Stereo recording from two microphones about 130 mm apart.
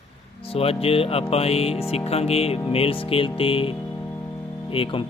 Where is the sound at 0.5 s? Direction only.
50° left (ahead or behind).